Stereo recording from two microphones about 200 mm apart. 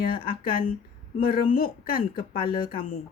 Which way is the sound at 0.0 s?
45° left (ahead or behind).